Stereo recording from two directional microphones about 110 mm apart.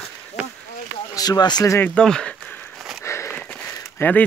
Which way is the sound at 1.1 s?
35° left (ahead or behind).